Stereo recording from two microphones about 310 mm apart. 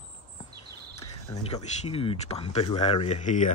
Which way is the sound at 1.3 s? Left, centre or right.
Centre.